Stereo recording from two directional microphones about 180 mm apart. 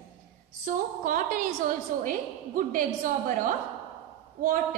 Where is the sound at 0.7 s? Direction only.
50° right (ahead or behind).